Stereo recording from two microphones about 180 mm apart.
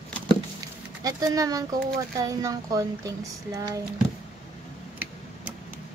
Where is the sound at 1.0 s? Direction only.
20° right (ahead or behind).